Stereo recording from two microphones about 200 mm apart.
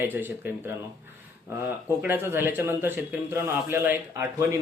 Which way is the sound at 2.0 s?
10° right (ahead or behind).